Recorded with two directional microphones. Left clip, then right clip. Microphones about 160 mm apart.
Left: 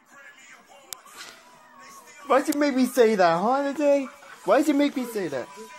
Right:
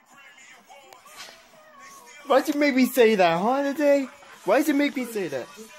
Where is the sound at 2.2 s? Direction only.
20° right (ahead or behind).